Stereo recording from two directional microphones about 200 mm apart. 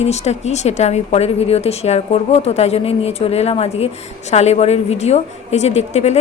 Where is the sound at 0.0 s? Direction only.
35° left (ahead or behind).